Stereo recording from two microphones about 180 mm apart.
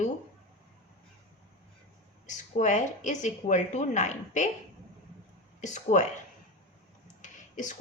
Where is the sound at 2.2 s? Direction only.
40° left (ahead or behind).